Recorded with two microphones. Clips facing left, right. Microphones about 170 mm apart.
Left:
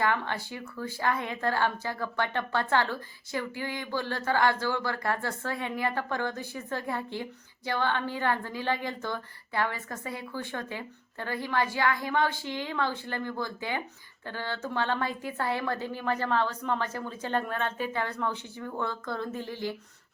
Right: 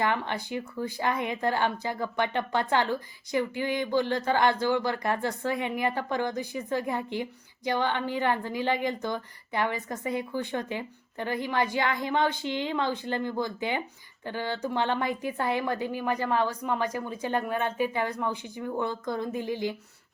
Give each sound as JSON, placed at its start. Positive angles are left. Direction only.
{"t": 0.0, "sound": "a woman's voice", "side_deg": -20}